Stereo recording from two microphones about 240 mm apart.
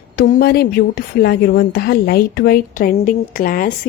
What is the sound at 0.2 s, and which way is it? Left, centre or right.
A woman's voice, left.